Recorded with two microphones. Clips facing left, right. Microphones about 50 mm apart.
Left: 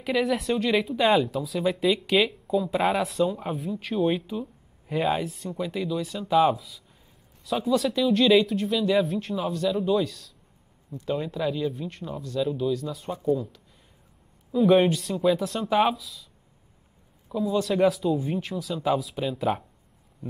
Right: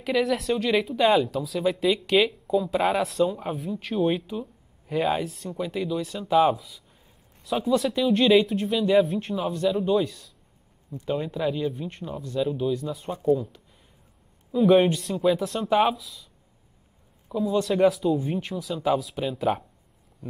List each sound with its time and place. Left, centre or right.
0.0 s speech: centre
14.5 s speech: centre
17.3 s speech: centre